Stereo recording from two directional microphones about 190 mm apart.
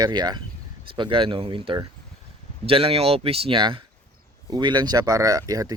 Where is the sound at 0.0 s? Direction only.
20° right (ahead or behind).